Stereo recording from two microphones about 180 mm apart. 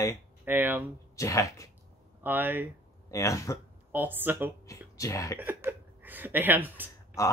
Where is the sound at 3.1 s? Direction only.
15° left (ahead or behind).